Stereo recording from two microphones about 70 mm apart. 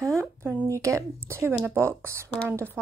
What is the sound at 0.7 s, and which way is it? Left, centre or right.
A woman's voice, right.